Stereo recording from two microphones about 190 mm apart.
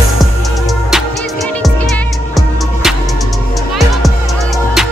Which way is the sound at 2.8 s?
Centre (ahead or behind).